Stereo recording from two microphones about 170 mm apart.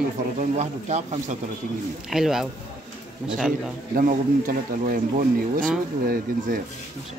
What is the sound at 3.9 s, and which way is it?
Speech, 55° right (ahead or behind).